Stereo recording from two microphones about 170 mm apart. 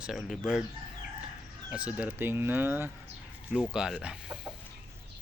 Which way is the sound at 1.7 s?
10° right (ahead or behind).